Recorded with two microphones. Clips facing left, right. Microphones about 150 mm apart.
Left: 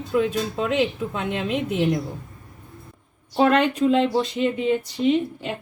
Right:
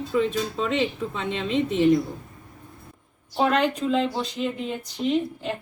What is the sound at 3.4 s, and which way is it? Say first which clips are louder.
Speech: left 4 dB; 75° left (ahead or behind).